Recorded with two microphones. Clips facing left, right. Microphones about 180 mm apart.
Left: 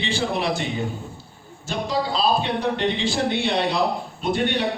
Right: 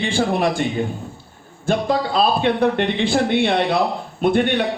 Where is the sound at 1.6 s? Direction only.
55° right (ahead or behind).